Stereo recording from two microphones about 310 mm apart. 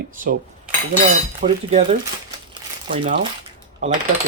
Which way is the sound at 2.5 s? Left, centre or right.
Centre.